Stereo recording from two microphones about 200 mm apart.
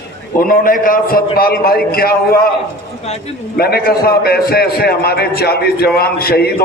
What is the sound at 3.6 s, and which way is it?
A man's voice, 50° left (ahead or behind).